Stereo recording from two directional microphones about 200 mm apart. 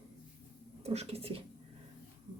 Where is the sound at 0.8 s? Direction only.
30° right (ahead or behind).